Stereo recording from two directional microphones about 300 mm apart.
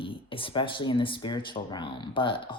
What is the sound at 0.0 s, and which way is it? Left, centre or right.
Speech, centre.